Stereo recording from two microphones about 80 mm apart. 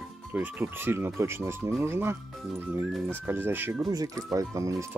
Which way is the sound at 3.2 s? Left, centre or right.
Right.